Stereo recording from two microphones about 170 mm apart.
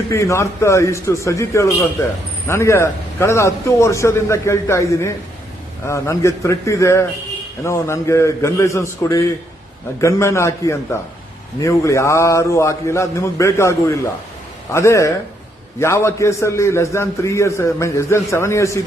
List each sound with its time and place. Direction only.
0.1 s a man's voice: 15° left (ahead or behind)